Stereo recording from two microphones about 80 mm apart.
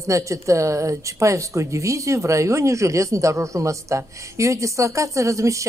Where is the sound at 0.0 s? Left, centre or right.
Right.